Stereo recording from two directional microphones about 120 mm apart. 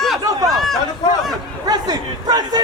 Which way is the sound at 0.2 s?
30° right (ahead or behind).